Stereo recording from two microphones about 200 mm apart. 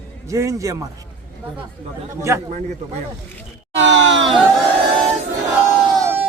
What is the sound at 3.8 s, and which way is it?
Speech, 65° right (ahead or behind).